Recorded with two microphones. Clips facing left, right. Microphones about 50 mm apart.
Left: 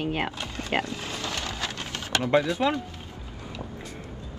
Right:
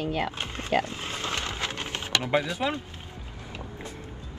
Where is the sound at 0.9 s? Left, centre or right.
Right.